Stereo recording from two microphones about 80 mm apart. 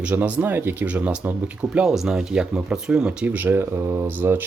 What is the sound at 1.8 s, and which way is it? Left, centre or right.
Speech, centre.